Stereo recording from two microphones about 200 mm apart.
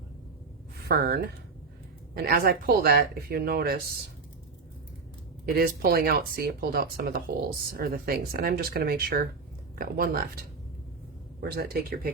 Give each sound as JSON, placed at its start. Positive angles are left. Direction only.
{"t": 0.9, "sound": "speech", "side_deg": -50}
{"t": 5.5, "sound": "speech", "side_deg": -50}